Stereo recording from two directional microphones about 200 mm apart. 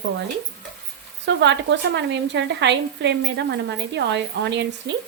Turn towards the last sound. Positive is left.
turn(degrees=-60)  # may be behind; listen again after turning